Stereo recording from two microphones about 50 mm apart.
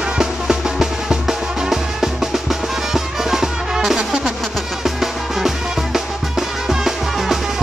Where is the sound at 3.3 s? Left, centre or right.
Centre.